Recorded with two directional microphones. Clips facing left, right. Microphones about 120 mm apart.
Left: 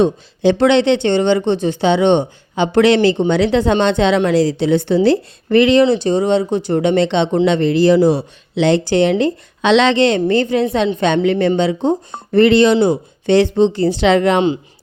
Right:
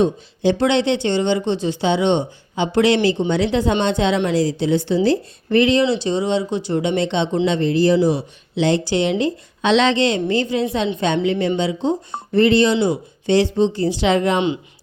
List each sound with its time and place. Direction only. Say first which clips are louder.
0.0 s speech: left 4 dB; 70° left (ahead or behind)
5.0 s speech: left 4 dB; 70° left (ahead or behind)
5.8 s speech: left 5 dB; 50° left (ahead or behind)
12.3 s speech: left 4 dB; 70° left (ahead or behind)